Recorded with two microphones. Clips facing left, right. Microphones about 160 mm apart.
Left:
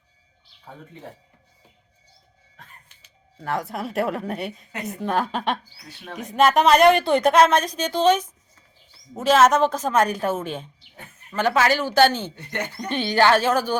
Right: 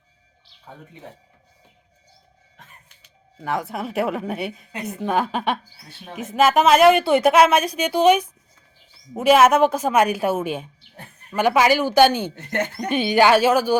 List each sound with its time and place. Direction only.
3.3 s speech: centre (ahead or behind)
12.4 s speech: 50° right (ahead or behind)
12.9 s speech: 10° right (ahead or behind)